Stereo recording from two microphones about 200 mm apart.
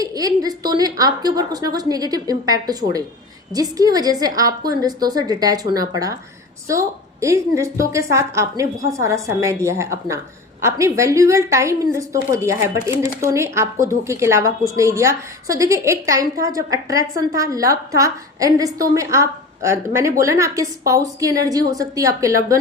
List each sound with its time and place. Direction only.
0.0 s a woman's voice: 20° right (ahead or behind)